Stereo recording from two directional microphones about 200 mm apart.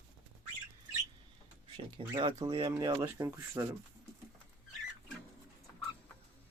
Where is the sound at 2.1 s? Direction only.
20° right (ahead or behind).